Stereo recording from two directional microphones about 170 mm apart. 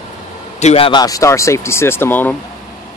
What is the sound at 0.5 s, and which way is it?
Speech, 35° left (ahead or behind).